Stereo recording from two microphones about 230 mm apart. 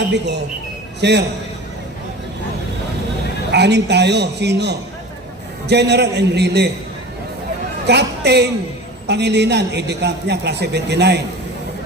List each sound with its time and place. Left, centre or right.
1.0 s a man's voice: right
3.5 s a man's voice: right
7.9 s a man's voice: right